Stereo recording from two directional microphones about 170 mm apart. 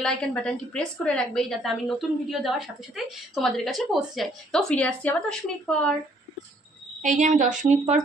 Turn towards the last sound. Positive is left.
turn(degrees=-45)  # may be behind; listen again after turning